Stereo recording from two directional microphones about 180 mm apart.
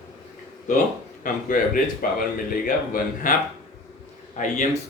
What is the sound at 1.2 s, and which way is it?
A man's voice, 50° left (ahead or behind).